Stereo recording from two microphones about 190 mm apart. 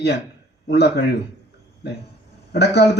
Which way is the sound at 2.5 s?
60° left (ahead or behind).